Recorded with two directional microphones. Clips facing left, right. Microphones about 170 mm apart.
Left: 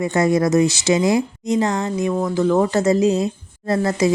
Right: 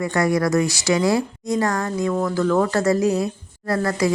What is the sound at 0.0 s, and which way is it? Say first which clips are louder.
Speech: left 3 dB; 20° left (ahead or behind).